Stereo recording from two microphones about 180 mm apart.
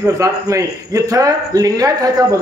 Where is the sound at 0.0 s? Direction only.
15° right (ahead or behind).